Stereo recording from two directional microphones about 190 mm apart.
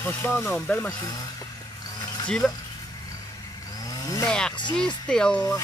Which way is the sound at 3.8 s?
20° left (ahead or behind).